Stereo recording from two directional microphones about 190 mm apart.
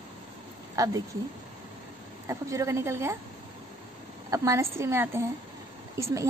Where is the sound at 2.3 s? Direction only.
15° right (ahead or behind).